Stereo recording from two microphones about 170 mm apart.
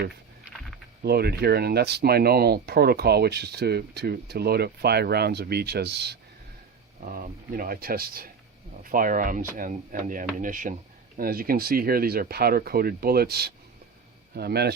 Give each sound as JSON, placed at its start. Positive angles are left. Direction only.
{"t": 1.0, "sound": "speech", "side_deg": -70}
{"t": 7.0, "sound": "speech", "side_deg": -55}